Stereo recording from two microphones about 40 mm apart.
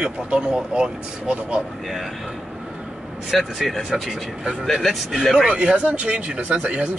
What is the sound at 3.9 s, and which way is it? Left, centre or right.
Speech, right.